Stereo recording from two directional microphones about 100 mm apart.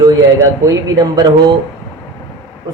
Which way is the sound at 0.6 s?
35° right (ahead or behind).